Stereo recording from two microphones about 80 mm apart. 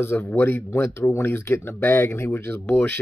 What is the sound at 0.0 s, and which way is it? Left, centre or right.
Speech, left.